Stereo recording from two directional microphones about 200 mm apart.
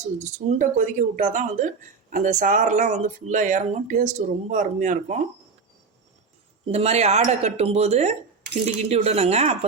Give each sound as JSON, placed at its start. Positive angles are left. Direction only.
{"t": 0.2, "sound": "speech", "side_deg": -35}
{"t": 6.7, "sound": "speech", "side_deg": -30}